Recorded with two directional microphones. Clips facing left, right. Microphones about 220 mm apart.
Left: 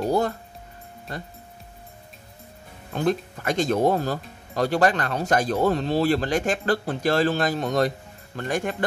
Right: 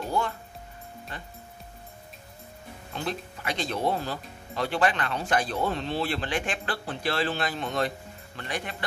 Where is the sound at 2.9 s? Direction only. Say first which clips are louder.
Left 9 dB; 45° left (ahead or behind).